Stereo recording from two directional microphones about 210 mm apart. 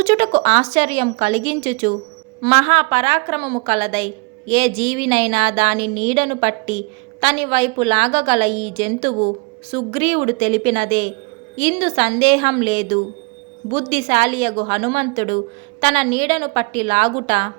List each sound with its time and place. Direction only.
0.0 s a woman's voice: 30° right (ahead or behind)